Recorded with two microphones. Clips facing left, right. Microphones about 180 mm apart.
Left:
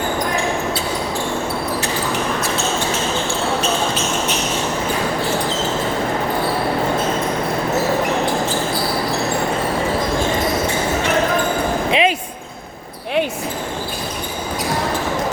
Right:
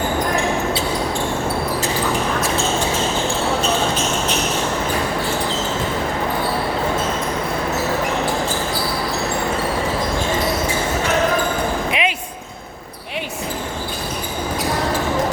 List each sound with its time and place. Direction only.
11.9 s basketball bounce: 30° left (ahead or behind)